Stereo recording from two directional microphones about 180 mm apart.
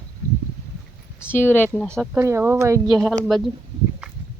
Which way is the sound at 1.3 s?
10° left (ahead or behind).